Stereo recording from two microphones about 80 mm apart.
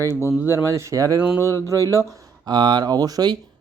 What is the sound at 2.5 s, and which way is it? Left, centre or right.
Speech, right.